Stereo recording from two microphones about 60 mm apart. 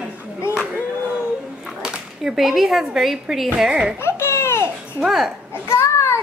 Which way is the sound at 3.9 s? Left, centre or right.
Left.